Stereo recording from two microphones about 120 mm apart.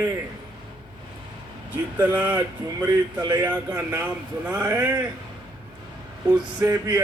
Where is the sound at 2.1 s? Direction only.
15° right (ahead or behind).